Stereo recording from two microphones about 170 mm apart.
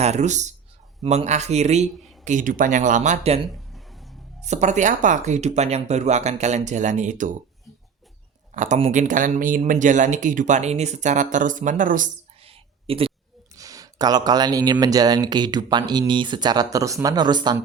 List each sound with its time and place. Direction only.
0.0 s speech: 40° right (ahead or behind)
4.4 s speech: 45° right (ahead or behind)
8.5 s speech: 45° right (ahead or behind)
12.4 s whispering: 35° right (ahead or behind)
13.6 s speech: 20° right (ahead or behind)